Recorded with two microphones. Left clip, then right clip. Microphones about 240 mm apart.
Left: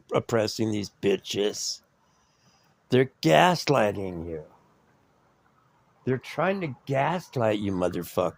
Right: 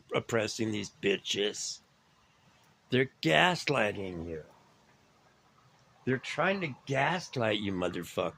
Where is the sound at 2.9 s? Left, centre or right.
Left.